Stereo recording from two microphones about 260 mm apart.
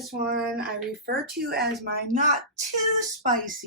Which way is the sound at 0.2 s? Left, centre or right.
Right.